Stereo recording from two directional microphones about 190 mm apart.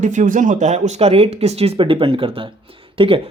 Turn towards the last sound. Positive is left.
turn(degrees=-30)  # may be behind; listen again after turning